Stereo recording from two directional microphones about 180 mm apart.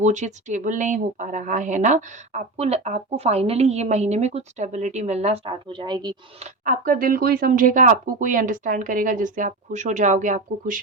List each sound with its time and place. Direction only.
0.0 s speech: 40° right (ahead or behind); by 6.1 s 25° right (ahead or behind)
6.4 s speech: 50° right (ahead or behind)